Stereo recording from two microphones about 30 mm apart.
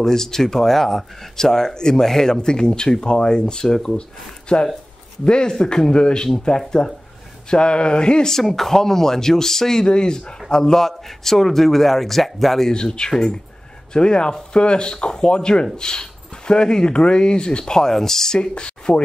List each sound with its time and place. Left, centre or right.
0.0 s speech: centre
4.5 s a sound: left
5.6 s speech: left
6.5 s a sound: left
8.3 s speech: centre
9.8 s speech: left
10.8 s speech: centre
12.7 s speech: left
17.7 s speech: centre
18.3 s speech: left